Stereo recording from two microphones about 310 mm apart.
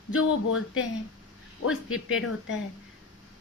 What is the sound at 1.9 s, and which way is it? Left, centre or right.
Speech, left.